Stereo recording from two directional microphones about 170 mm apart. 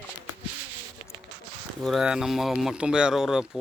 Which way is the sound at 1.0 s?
30° left (ahead or behind).